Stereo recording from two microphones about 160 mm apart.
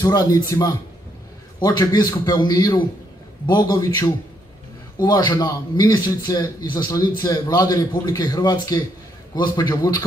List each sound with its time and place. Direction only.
0.0 s a man's voice: 20° left (ahead or behind)